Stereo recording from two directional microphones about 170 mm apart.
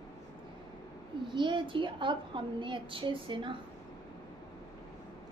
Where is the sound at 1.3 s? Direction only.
30° right (ahead or behind).